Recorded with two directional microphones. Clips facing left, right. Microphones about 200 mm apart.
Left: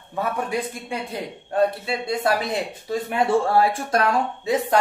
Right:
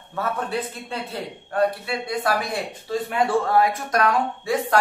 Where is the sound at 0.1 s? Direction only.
15° left (ahead or behind).